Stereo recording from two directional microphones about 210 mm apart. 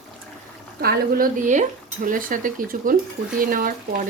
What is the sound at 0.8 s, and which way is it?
A woman's voice, 45° right (ahead or behind).